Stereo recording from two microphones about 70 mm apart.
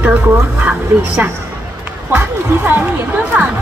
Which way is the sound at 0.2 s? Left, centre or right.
Right.